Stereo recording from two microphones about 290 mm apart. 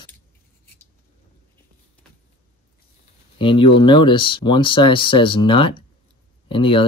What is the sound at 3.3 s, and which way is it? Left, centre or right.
Speech, centre.